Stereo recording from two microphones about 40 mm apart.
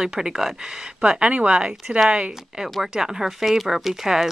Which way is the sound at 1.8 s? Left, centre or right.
Centre.